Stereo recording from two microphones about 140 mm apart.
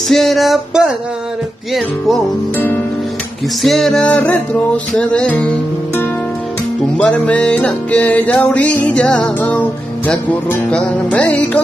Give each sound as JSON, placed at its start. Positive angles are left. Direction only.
{"t": 0.1, "sound": "music", "side_deg": 0}
{"t": 2.5, "sound": "music", "side_deg": 15}
{"t": 3.6, "sound": "music", "side_deg": 0}